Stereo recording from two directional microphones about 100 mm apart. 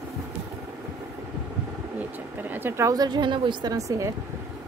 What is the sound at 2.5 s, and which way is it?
A woman's voice, 25° right (ahead or behind).